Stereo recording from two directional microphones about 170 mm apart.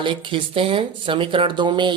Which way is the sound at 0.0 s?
30° right (ahead or behind).